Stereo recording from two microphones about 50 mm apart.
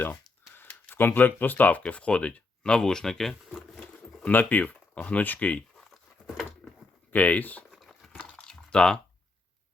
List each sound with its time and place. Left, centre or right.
0.9 s speech: left
1.8 s speech: left; by 4.2 s centre
4.3 s speech: left
4.7 s speech: left
5.9 s a sound: centre
7.1 s speech: left
7.7 s a sound: centre
8.4 s typing: centre